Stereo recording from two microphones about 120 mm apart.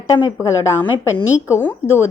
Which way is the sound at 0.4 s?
20° left (ahead or behind).